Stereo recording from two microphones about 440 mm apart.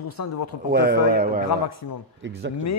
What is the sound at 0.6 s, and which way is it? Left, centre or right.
Speech, right.